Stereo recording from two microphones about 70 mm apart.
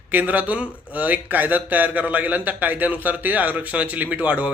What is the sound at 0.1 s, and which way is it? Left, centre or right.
Speech, right.